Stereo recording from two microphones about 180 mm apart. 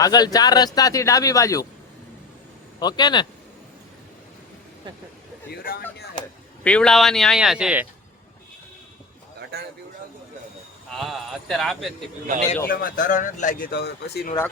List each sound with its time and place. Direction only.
0.0 s a man's voice: 20° left (ahead or behind)
2.8 s a man's voice: 25° left (ahead or behind)
5.5 s speech: 55° left (ahead or behind)
6.7 s speech: 5° left (ahead or behind)
10.9 s speech: centre (ahead or behind)
12.6 s speech: 50° left (ahead or behind)
13.7 s speech: 65° left (ahead or behind)